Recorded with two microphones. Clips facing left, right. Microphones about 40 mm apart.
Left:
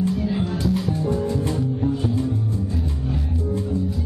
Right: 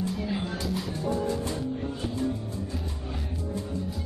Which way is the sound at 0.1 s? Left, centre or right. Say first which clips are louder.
Left 7 dB; centre.